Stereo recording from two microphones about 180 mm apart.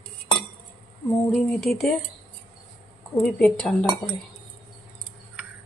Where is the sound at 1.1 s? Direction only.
5° left (ahead or behind).